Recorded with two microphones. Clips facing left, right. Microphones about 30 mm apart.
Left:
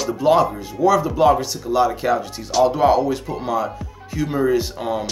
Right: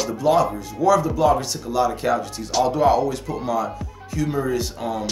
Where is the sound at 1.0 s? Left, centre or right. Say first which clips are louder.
Left 3 dB; left.